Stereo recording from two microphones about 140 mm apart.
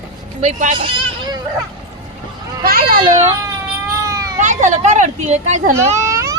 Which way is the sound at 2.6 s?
90° right.